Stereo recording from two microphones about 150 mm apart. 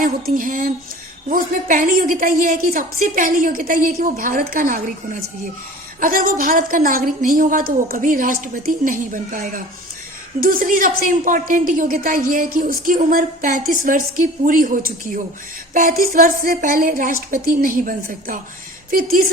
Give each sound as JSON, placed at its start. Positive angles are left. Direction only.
{"t": 0.3, "sound": "a sound", "side_deg": -65}
{"t": 1.3, "sound": "a woman's voice", "side_deg": -65}
{"t": 6.0, "sound": "a woman's voice", "side_deg": -70}